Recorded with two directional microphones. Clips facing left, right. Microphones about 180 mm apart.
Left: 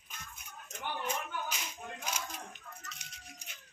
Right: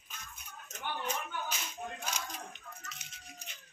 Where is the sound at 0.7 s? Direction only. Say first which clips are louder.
Even; 10° left (ahead or behind).